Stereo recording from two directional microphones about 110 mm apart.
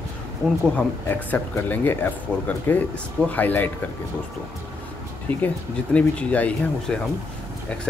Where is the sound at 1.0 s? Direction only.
20° left (ahead or behind).